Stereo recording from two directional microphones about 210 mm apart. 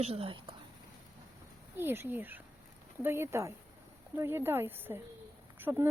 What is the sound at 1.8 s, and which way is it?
Speech, 10° right (ahead or behind).